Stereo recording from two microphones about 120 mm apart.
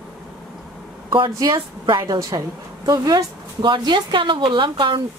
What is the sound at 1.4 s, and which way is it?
A woman's voice, 40° right (ahead or behind).